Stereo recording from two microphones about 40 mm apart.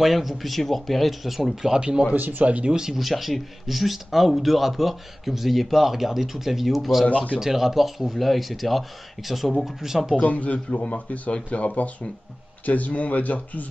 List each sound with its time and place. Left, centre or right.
0.0 s speech: centre
1.7 s speech: right
2.1 s speech: right
2.7 s speech: centre
3.0 s speech: centre
10.2 s speech: left